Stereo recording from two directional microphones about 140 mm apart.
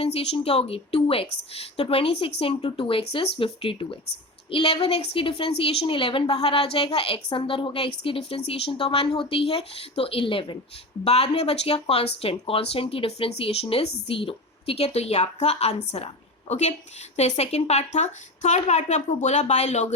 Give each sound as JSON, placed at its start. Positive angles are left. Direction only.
{"t": 0.0, "sound": "a woman's voice", "side_deg": 45}